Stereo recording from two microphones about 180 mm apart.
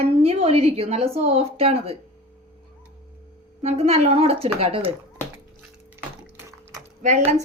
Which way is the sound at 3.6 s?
35° right (ahead or behind).